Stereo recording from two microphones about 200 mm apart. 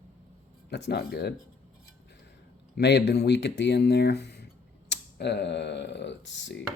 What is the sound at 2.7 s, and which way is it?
Speech, 55° left (ahead or behind).